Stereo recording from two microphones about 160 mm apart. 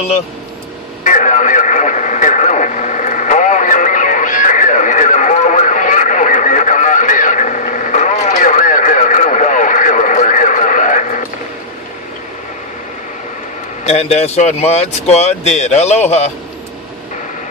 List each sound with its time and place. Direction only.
1.0 s radio: 50° left (ahead or behind)
13.8 s speech: 40° left (ahead or behind)